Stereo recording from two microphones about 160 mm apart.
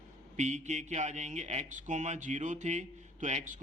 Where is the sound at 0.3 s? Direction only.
45° right (ahead or behind).